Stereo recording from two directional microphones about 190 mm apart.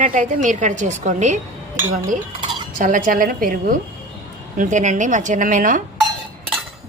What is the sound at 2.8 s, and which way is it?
A woman's voice, 45° right (ahead or behind).